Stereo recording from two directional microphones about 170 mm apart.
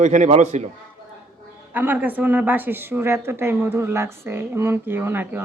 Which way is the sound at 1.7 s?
10° right (ahead or behind).